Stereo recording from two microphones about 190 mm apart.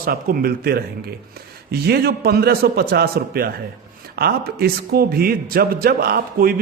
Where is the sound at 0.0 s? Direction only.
50° right (ahead or behind).